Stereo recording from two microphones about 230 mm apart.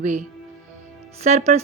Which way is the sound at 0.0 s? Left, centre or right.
Right.